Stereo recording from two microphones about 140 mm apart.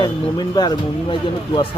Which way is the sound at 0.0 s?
30° left (ahead or behind).